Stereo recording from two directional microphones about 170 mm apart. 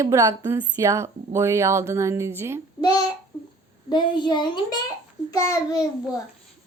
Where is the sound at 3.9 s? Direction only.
25° left (ahead or behind).